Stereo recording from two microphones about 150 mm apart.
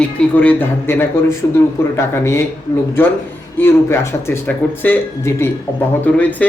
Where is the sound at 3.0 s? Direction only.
15° left (ahead or behind).